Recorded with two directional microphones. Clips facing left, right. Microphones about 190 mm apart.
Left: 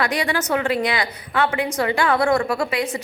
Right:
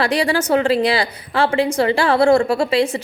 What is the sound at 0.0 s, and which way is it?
A woman's voice, 30° right (ahead or behind).